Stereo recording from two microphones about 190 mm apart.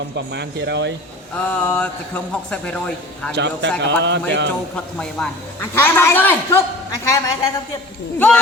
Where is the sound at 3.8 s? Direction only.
70° right (ahead or behind).